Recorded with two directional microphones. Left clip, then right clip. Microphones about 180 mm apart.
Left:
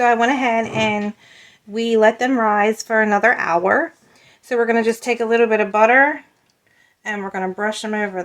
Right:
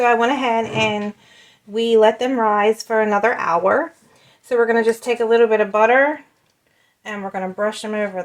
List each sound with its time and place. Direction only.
0.0 s speech: 25° left (ahead or behind)